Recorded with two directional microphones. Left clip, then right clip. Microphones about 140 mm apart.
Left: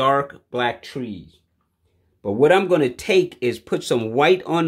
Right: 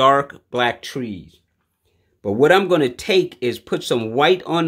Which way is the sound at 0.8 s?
35° right (ahead or behind).